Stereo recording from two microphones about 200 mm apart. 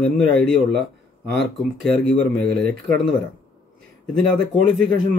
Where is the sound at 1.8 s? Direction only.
5° left (ahead or behind).